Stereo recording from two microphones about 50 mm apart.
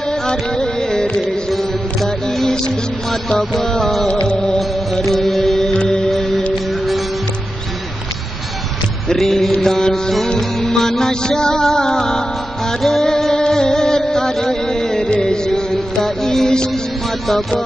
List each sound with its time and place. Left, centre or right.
0.1 s carnatic music: centre
1.5 s music: centre
4.1 s music: centre
4.6 s music: centre
5.7 s music: centre
6.0 s music: centre
9.1 s a sound: centre
9.6 s music: centre